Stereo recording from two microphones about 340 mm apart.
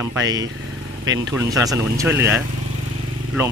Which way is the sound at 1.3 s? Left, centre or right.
Centre.